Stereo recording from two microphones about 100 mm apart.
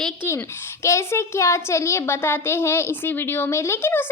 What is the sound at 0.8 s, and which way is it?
A child's voice, 30° left (ahead or behind).